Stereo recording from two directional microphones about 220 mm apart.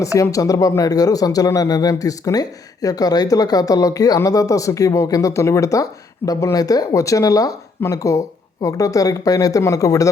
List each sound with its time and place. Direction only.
0.0 s speech: 15° left (ahead or behind)